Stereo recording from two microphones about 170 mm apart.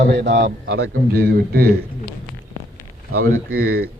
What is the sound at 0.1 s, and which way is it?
Speech, 90° right.